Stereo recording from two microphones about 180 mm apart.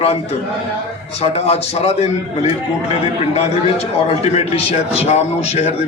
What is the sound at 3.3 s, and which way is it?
A man's voice, 35° left (ahead or behind).